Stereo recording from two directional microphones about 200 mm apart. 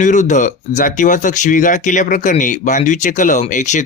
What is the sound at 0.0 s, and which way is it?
Speech, 40° left (ahead or behind).